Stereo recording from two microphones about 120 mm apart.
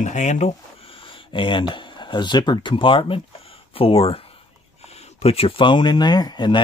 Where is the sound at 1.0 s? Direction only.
45° left (ahead or behind).